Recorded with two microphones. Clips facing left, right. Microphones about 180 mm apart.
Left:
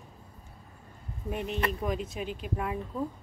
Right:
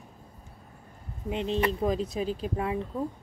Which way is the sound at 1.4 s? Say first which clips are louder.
Right 6 dB; 30° right (ahead or behind).